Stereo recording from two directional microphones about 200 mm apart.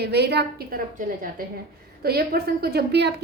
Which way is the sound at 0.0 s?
55° right (ahead or behind).